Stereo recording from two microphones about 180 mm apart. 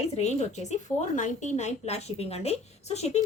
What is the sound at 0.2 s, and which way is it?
A woman's voice, 40° left (ahead or behind).